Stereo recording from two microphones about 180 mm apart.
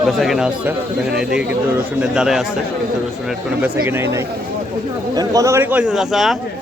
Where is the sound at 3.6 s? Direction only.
10° right (ahead or behind).